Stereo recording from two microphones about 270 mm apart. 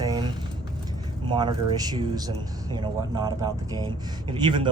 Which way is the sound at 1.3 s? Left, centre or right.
Centre.